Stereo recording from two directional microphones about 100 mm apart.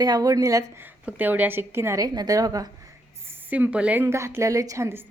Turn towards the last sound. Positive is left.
turn(degrees=-30)  # may be behind; listen again after turning